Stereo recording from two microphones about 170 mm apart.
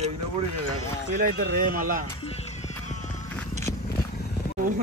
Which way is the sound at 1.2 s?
55° right (ahead or behind).